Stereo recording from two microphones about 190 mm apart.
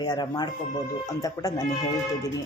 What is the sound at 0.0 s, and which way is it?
Speech, 20° left (ahead or behind).